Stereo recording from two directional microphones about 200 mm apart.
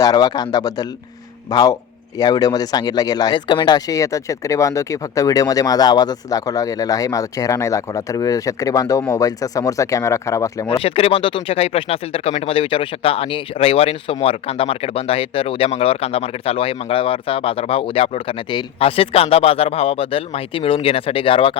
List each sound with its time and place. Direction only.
0.0 s speech: 20° left (ahead or behind)
10.7 s speech: 30° left (ahead or behind)